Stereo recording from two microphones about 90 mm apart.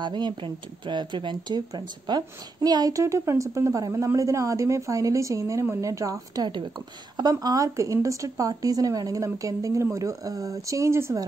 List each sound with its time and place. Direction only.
0.0 s speech: 60° right (ahead or behind); by 11.1 s 30° right (ahead or behind)